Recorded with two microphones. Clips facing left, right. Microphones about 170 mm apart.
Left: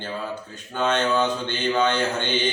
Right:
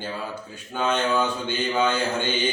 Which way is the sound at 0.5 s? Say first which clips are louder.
Left 1 dB; 10° right (ahead or behind).